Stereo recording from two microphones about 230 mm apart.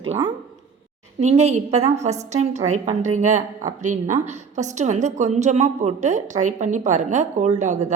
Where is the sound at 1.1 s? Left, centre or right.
Right.